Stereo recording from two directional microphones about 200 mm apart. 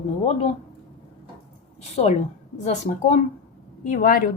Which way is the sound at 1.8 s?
35° left (ahead or behind).